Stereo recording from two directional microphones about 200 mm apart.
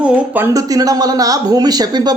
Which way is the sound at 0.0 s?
10° right (ahead or behind).